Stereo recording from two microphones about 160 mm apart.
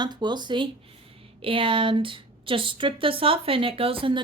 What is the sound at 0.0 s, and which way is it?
A woman's voice, 25° right (ahead or behind).